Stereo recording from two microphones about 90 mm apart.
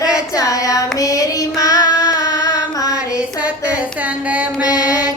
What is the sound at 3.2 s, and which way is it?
Female singing, 15° right (ahead or behind).